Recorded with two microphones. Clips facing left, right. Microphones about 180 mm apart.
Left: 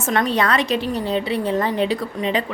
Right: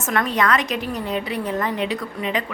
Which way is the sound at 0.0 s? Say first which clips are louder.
Left 2 dB; 25° left (ahead or behind).